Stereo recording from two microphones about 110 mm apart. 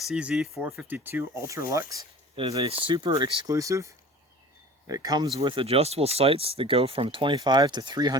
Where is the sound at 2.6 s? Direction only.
50° right (ahead or behind); by 5.3 s 35° right (ahead or behind).